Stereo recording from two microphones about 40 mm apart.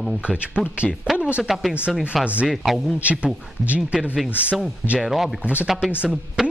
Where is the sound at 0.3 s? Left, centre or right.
Right.